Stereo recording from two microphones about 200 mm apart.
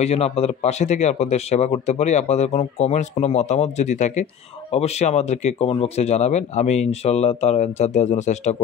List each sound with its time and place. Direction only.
0.0 s speech: 30° left (ahead or behind)